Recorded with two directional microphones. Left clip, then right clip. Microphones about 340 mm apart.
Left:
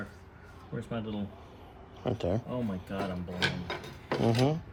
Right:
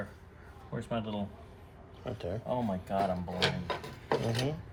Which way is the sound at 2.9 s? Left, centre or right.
Centre.